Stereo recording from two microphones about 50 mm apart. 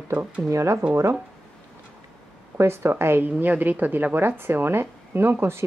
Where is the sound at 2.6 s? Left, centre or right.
Right.